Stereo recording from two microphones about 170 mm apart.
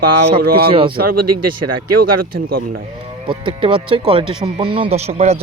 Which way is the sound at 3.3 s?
30° right (ahead or behind).